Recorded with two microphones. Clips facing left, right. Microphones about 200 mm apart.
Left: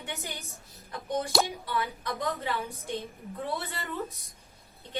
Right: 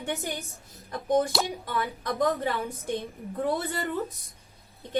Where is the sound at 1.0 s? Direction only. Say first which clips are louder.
Right 4 dB; 50° right (ahead or behind).